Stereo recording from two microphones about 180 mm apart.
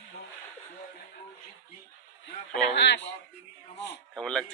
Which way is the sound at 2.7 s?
75° left (ahead or behind).